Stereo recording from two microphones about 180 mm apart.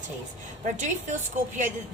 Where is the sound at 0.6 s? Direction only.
45° right (ahead or behind).